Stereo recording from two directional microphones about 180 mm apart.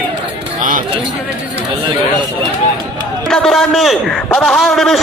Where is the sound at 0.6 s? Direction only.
45° right (ahead or behind).